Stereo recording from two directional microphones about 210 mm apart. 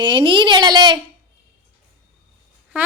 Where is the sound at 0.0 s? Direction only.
25° right (ahead or behind).